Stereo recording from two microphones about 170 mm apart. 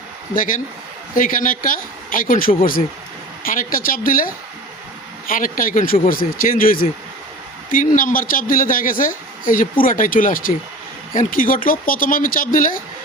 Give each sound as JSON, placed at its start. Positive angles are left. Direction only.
{"t": 0.3, "sound": "a man's voice", "side_deg": 50}
{"t": 5.3, "sound": "a man's voice", "side_deg": 55}